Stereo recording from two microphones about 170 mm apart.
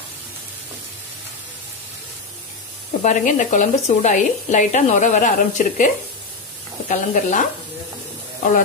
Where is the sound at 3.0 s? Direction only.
45° left (ahead or behind).